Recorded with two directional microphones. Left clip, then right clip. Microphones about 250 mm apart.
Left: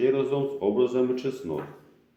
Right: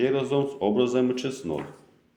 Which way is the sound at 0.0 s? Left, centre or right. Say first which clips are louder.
Even; right.